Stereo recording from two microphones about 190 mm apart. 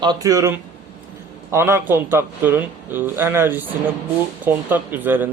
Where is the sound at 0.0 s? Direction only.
20° right (ahead or behind).